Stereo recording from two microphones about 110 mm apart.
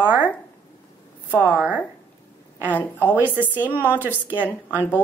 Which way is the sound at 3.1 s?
15° right (ahead or behind).